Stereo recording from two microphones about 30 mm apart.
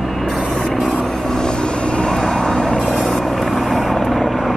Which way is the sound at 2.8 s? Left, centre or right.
Centre.